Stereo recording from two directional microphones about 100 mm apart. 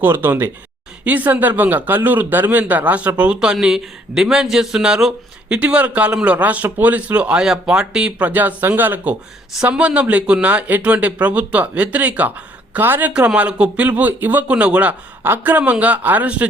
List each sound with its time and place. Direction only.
0.0 s speech: 20° right (ahead or behind)